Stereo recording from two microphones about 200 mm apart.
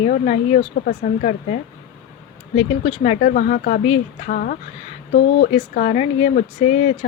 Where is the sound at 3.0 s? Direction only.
45° left (ahead or behind).